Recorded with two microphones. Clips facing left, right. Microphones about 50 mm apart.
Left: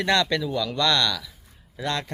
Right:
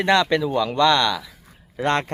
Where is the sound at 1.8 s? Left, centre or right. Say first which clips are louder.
Right 7 dB; right.